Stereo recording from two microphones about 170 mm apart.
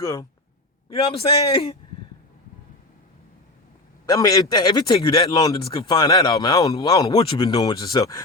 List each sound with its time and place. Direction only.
0.0 s a man's voice: 20° left (ahead or behind)
0.9 s a man's voice: 35° left (ahead or behind)
4.1 s a man's voice: 20° left (ahead or behind)